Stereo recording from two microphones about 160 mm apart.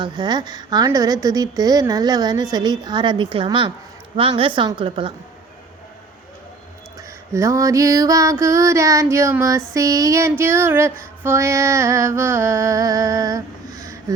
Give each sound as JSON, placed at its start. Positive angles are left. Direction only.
{"t": 0.0, "sound": "a woman's voice", "side_deg": -25}
{"t": 7.3, "sound": "a woman's voice", "side_deg": -20}
{"t": 9.7, "sound": "a sound", "side_deg": -20}